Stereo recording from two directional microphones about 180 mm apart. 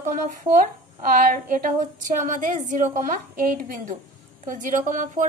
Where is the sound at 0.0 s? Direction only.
45° right (ahead or behind).